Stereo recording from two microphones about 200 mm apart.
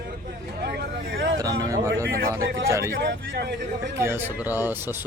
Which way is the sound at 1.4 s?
15° right (ahead or behind).